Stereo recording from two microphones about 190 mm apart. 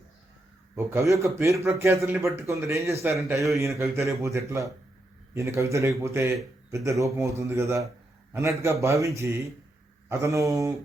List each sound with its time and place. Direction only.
0.8 s a man's voice: 15° right (ahead or behind)